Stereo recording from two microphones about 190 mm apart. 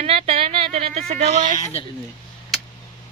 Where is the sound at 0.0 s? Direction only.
30° right (ahead or behind).